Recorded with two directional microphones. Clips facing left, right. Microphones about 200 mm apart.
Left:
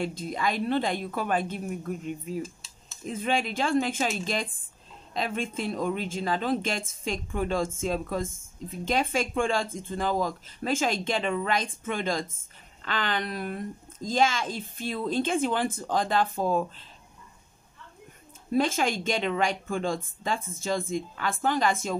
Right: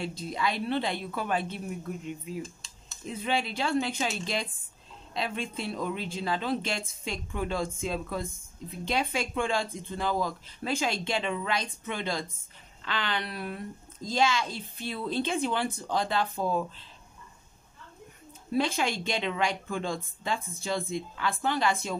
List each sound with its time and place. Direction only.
0.0 s speech: 50° left (ahead or behind)
2.4 s a sound: 5° left (ahead or behind)
3.1 s speech: 50° left (ahead or behind)
18.5 s speech: 45° left (ahead or behind)